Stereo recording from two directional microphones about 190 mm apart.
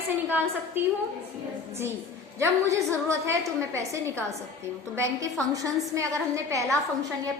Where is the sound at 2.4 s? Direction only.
15° right (ahead or behind).